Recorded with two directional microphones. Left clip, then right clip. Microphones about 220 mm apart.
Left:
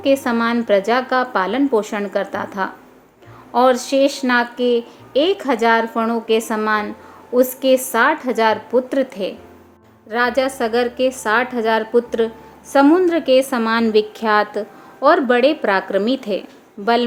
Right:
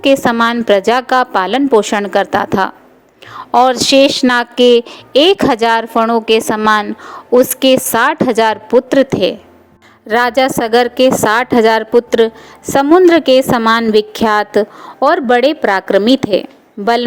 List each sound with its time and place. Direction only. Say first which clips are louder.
0.0 s a woman's voice: right 6 dB; 35° right (ahead or behind)